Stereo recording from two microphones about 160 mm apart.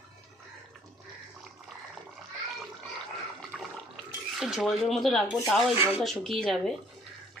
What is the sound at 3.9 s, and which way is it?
Speech, centre (ahead or behind).